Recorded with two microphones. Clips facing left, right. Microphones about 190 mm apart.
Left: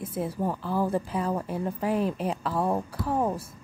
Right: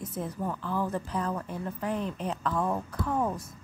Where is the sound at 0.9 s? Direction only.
10° left (ahead or behind).